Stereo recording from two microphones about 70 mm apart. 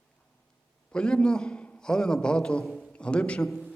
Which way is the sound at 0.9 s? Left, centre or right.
Centre.